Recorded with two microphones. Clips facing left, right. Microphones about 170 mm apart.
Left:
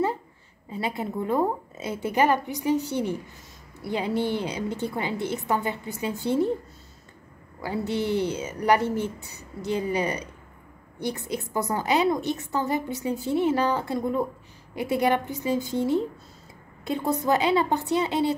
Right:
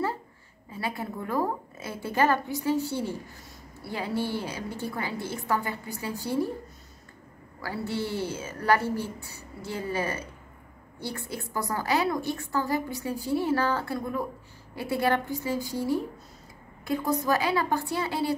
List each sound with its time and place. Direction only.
0.7 s a woman's voice: 20° left (ahead or behind)
7.6 s a woman's voice: 20° left (ahead or behind)